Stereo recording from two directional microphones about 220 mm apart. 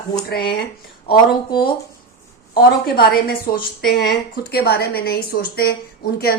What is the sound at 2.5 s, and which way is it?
A woman's voice, 45° left (ahead or behind).